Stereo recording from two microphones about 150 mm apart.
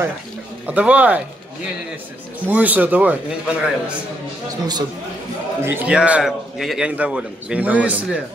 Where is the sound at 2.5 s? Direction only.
10° right (ahead or behind).